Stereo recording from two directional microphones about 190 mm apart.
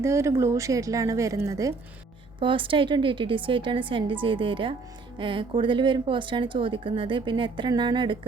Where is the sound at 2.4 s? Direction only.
25° right (ahead or behind).